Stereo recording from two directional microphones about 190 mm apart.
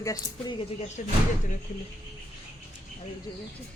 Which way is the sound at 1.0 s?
40° left (ahead or behind).